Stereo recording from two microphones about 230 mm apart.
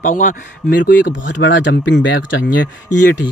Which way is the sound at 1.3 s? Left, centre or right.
Left.